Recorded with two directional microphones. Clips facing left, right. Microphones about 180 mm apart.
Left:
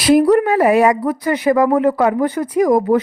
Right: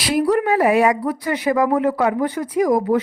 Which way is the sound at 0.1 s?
50° left (ahead or behind).